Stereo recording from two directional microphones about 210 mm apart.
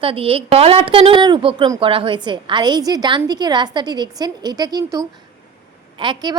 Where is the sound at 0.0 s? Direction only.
25° right (ahead or behind).